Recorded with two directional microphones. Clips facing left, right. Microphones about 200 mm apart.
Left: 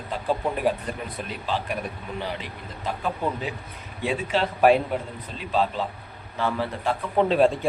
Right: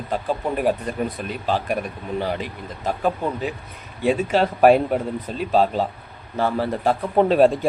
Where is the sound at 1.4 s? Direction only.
45° right (ahead or behind).